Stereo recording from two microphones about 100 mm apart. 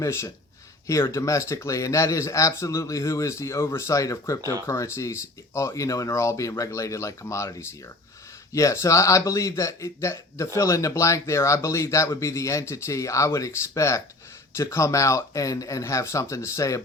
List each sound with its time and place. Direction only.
0.0 s a man's voice: 25° left (ahead or behind)